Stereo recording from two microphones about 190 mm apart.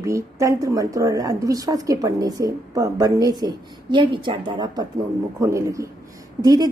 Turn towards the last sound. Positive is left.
turn(degrees=-20)  # may be behind; listen again after turning